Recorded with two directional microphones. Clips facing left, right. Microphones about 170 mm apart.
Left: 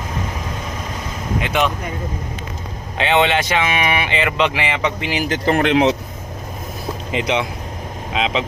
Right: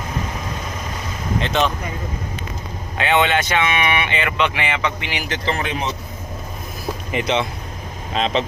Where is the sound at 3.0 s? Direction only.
25° left (ahead or behind); by 5.9 s 80° left.